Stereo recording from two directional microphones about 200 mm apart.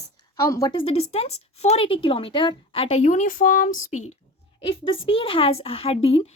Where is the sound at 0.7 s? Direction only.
30° left (ahead or behind).